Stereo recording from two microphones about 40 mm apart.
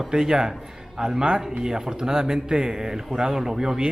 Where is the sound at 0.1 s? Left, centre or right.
Centre.